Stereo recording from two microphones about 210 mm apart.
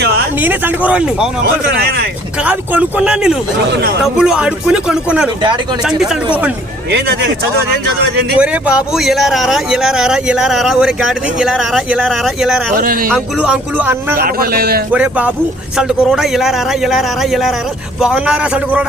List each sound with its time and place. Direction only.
0.4 s speech: 10° right (ahead or behind)
1.6 s a man's voice: 50° right (ahead or behind)
2.4 s speech: 5° right (ahead or behind)
6.9 s a man's voice: 55° right (ahead or behind)
8.4 s speech: 5° right (ahead or behind)
14.2 s a man's voice: 45° right (ahead or behind)
14.9 s speech: 5° right (ahead or behind)